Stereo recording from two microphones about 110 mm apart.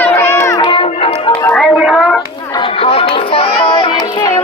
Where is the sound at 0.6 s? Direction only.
45° left (ahead or behind).